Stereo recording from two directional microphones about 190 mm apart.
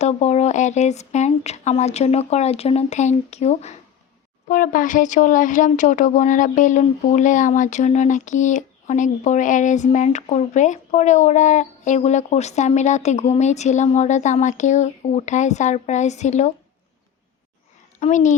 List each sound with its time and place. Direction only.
0.0 s speech: 35° left (ahead or behind)
4.4 s speech: 45° left (ahead or behind)
18.0 s speech: 40° left (ahead or behind)